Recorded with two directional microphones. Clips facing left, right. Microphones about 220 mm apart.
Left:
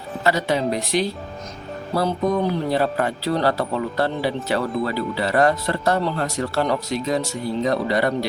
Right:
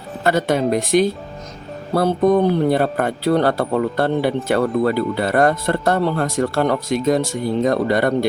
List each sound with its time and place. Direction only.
0.3 s speech: 50° right (ahead or behind)